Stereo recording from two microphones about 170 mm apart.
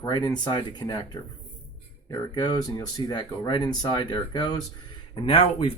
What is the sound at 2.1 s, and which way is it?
Speech, 25° left (ahead or behind).